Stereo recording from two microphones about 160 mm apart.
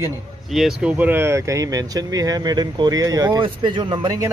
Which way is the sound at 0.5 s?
Centre (ahead or behind).